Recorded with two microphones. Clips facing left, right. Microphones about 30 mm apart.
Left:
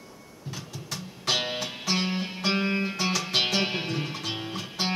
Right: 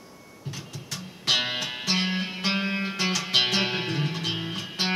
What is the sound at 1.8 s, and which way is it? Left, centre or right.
Music, centre.